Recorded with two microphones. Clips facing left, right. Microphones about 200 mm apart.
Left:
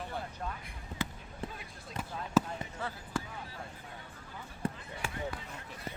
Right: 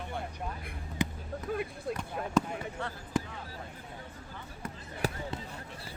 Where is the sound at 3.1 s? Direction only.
20° right (ahead or behind).